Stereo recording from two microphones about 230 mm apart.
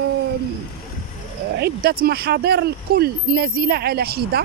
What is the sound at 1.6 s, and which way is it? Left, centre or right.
Speech, right.